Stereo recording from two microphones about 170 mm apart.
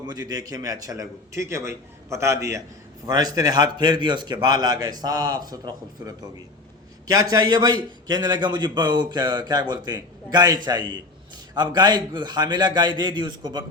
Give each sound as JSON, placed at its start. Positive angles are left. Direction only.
{"t": 0.0, "sound": "a man's voice", "side_deg": -25}